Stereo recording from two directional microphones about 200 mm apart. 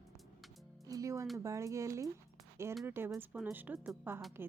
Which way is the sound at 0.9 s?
15° right (ahead or behind).